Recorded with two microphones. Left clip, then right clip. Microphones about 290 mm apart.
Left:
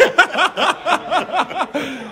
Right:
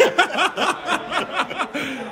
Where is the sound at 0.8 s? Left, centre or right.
Left.